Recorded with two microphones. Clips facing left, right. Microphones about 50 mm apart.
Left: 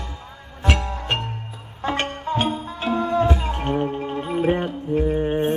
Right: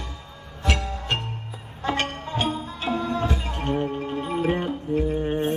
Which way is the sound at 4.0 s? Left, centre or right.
Centre.